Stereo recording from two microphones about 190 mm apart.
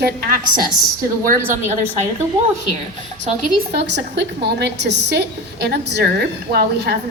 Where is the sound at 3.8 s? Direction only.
65° right (ahead or behind).